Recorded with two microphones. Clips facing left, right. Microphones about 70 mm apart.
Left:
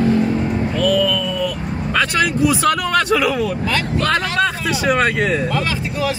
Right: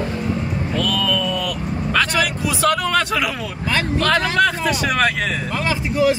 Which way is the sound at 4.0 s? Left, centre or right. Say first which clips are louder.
Right 1 dB; centre.